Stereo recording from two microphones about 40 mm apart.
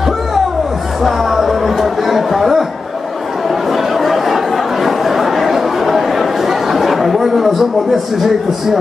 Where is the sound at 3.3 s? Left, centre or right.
Centre.